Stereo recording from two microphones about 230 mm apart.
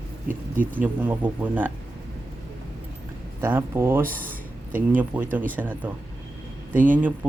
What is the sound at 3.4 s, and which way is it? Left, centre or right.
Speech, centre.